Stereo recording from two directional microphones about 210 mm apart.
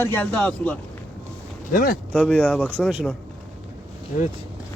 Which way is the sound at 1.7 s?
40° left (ahead or behind).